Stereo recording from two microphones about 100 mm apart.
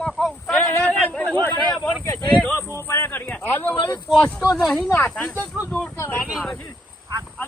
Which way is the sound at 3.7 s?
50° left (ahead or behind).